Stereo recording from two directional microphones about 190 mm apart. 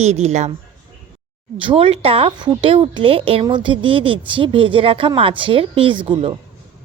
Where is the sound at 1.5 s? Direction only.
30° right (ahead or behind).